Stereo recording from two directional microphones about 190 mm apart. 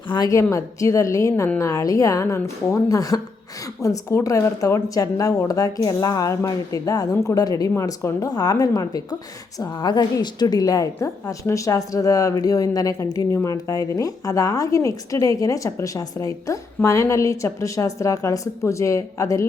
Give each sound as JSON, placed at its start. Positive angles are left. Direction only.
{"t": 0.1, "sound": "a woman's voice", "side_deg": 20}